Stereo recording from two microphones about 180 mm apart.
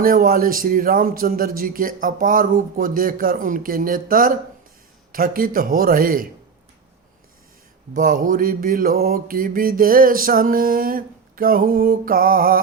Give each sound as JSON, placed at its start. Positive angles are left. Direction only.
{"t": 0.0, "sound": "mantra", "side_deg": -50}
{"t": 7.9, "sound": "mantra", "side_deg": -50}